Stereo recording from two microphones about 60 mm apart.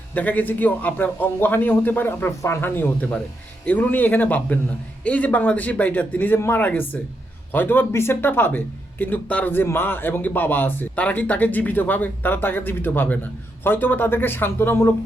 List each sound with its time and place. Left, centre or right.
0.1 s a man's voice: left
3.7 s a man's voice: left